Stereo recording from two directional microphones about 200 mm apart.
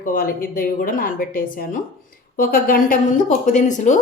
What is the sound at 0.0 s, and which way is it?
A woman's voice, 45° left (ahead or behind).